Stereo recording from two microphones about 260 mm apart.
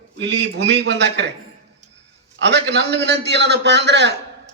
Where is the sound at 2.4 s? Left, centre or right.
Right.